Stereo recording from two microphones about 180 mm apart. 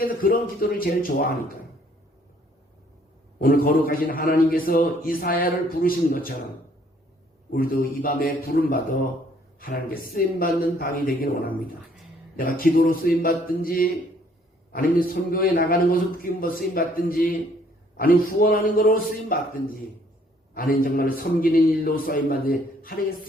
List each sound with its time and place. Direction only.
0.0 s a man's voice: 55° left (ahead or behind)
3.3 s a man's voice: 55° left (ahead or behind)
7.5 s a man's voice: 55° left (ahead or behind)